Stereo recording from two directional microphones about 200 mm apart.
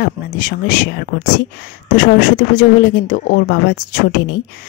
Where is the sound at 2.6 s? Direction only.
45° left (ahead or behind).